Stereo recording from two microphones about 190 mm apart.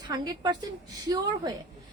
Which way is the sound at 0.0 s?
20° right (ahead or behind).